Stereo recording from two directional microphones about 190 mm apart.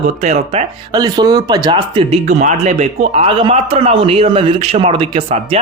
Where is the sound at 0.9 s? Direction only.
20° right (ahead or behind).